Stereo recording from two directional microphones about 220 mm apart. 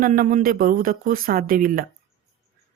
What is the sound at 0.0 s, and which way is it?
Speech, 40° right (ahead or behind).